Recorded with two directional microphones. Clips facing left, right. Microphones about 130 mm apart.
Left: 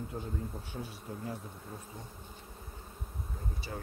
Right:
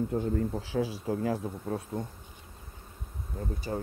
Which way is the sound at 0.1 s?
65° right (ahead or behind).